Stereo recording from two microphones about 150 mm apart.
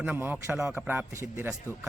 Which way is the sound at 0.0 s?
10° right (ahead or behind).